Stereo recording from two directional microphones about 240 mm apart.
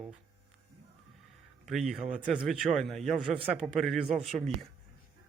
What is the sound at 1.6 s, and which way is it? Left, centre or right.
Speech, centre.